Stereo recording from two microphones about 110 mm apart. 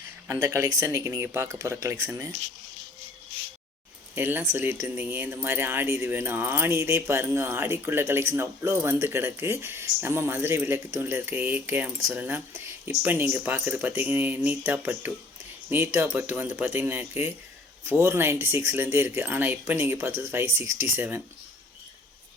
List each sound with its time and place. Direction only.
0.3 s speech: 25° right (ahead or behind)
4.1 s speech: 20° right (ahead or behind)